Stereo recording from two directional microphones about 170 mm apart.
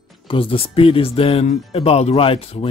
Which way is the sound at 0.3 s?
30° left (ahead or behind).